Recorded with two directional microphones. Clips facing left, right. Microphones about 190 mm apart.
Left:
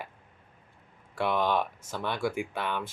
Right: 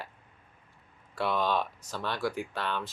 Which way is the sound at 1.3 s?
20° left (ahead or behind).